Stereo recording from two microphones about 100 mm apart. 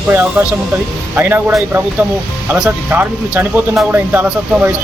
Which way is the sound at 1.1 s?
20° right (ahead or behind).